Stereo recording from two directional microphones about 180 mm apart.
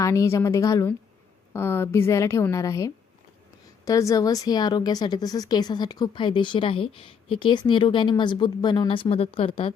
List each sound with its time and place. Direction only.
0.0 s a woman's voice: 15° left (ahead or behind)